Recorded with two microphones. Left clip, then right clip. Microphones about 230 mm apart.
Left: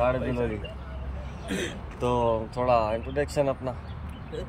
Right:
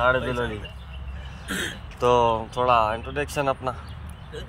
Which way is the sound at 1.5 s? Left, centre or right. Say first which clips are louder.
Right 3 dB; centre.